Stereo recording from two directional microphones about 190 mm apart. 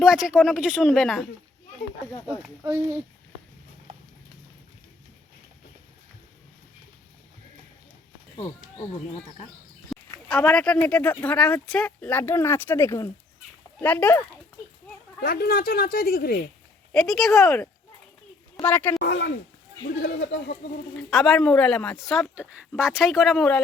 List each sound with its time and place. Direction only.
0.0 s speech: 5° right (ahead or behind)
9.9 s speech: 5° left (ahead or behind)
15.2 s speech: 55° left (ahead or behind)
16.9 s a woman's voice: centre (ahead or behind)
18.9 s speech: 65° left (ahead or behind)
20.9 s speech: centre (ahead or behind)